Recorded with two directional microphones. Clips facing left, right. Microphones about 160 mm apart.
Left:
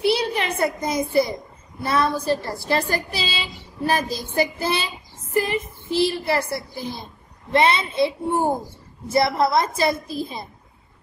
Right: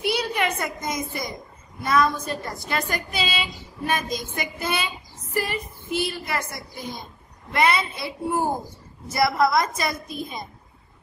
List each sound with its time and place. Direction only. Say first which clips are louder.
0.0 s a child's voice: left 3 dB; 30° left (ahead or behind)